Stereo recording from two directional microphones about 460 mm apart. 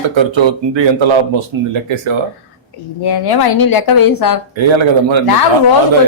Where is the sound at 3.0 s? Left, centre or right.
Left.